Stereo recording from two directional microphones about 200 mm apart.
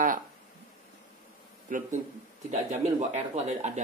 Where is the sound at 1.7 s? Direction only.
40° right (ahead or behind).